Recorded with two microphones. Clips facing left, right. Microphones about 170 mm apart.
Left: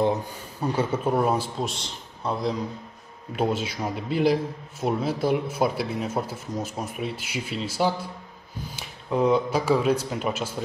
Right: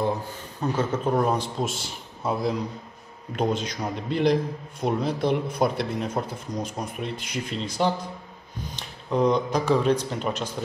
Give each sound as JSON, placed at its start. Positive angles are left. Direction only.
{"t": 0.6, "sound": "a man's voice", "side_deg": 10}